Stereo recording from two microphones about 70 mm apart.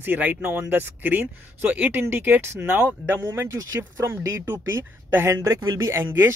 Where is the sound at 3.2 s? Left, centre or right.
Right.